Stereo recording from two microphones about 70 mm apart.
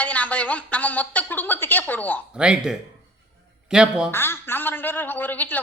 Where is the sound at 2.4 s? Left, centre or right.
Centre.